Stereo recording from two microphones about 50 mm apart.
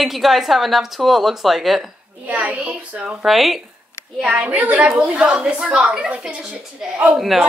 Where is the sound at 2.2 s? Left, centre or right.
Right.